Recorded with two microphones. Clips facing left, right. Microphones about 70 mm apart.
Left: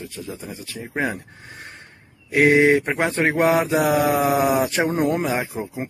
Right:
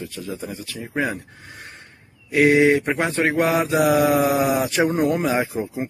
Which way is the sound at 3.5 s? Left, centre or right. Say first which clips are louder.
Left 1 dB; centre.